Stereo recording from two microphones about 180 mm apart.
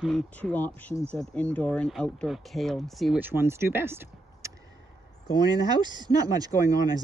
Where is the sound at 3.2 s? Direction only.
10° right (ahead or behind).